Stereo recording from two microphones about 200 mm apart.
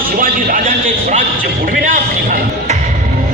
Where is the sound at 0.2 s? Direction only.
45° right (ahead or behind).